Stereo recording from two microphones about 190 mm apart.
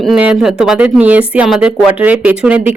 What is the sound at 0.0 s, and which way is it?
Speech, 5° right (ahead or behind).